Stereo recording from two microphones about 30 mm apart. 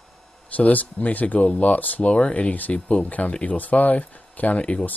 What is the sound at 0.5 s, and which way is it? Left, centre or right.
Speech, left.